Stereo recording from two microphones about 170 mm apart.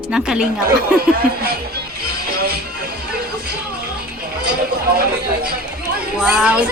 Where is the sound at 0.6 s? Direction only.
65° right (ahead or behind).